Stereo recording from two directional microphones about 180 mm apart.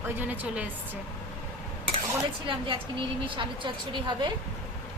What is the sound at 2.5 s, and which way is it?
A woman's voice, 30° right (ahead or behind).